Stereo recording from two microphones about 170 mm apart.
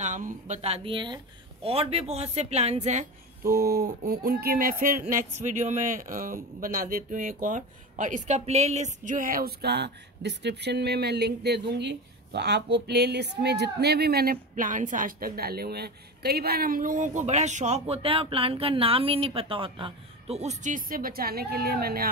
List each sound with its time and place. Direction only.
0.0 s speech: 45° right (ahead or behind)
3.4 s speech: 65° right (ahead or behind)